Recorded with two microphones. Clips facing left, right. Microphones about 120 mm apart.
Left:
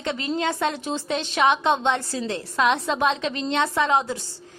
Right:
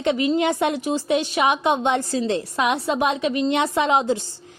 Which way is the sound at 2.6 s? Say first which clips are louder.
Even; 10° right (ahead or behind).